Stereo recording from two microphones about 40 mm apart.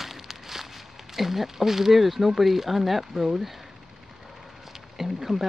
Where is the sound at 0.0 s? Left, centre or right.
Centre.